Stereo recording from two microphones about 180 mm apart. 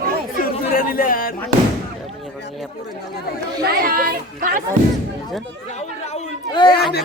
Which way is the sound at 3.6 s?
55° right (ahead or behind).